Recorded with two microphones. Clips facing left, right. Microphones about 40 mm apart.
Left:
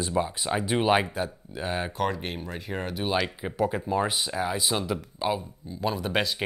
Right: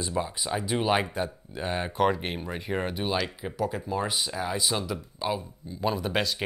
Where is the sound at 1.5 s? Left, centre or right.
Centre.